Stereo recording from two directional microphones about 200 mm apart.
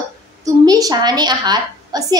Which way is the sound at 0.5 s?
20° right (ahead or behind).